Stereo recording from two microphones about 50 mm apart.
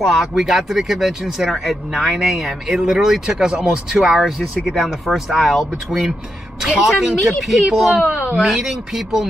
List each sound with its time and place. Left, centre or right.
0.0 s speech: centre